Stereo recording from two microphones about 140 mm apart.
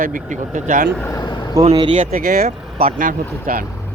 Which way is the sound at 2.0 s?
80° right.